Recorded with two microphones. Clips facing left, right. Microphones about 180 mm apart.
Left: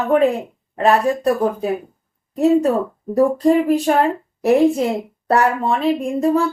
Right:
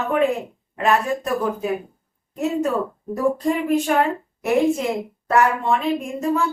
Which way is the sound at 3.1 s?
35° left (ahead or behind).